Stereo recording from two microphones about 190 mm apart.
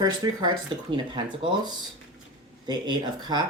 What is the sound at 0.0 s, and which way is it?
Speech, 25° right (ahead or behind).